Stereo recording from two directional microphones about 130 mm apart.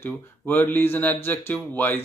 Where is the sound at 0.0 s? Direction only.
15° left (ahead or behind).